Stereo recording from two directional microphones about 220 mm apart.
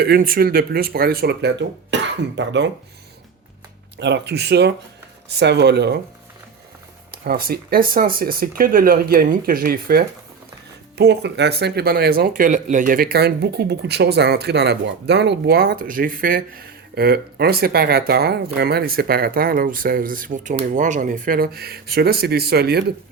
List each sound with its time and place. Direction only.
0.0 s speech: 45° right (ahead or behind)
3.9 s speech: 50° right (ahead or behind)
7.1 s speech: 45° right (ahead or behind)